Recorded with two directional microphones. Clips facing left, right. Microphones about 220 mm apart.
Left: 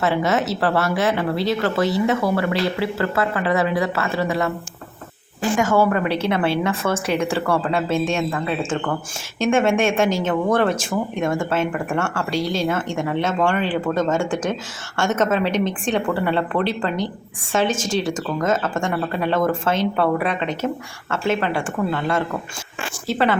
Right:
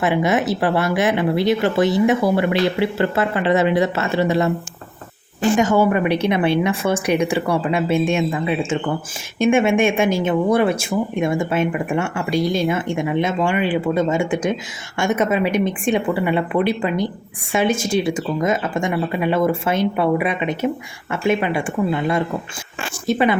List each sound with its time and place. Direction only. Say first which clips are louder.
0.0 s a woman's voice: right 2 dB; 15° right (ahead or behind)